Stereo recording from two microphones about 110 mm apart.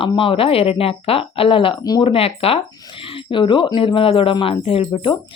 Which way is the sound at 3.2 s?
50° left (ahead or behind).